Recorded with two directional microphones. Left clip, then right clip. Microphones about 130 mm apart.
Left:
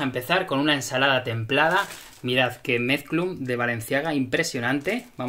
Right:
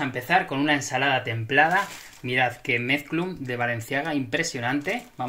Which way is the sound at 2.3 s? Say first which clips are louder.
Even; 65° left (ahead or behind).